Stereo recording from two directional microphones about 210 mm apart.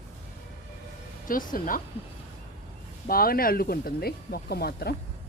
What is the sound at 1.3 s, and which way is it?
Speech, 40° left (ahead or behind).